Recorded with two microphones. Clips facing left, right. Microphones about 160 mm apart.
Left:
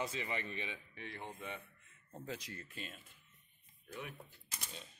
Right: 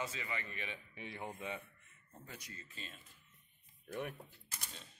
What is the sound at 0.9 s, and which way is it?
Speech, 15° right (ahead or behind).